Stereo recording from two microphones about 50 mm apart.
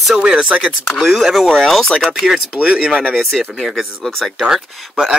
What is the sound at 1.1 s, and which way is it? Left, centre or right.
Speech, centre.